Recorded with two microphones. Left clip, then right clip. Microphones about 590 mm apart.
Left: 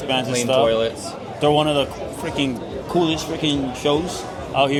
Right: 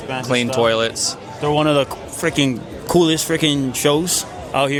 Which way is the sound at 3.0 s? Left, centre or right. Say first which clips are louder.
Right 5 dB; right.